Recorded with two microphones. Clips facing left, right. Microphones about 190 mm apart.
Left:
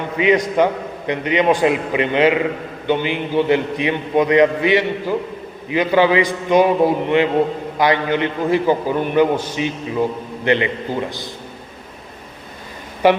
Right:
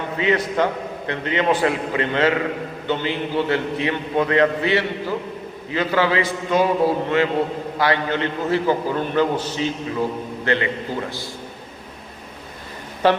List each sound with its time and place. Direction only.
0.2 s a man's voice: 15° left (ahead or behind)
13.0 s a man's voice: 10° left (ahead or behind)